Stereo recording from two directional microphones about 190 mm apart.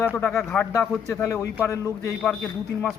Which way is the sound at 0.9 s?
15° left (ahead or behind).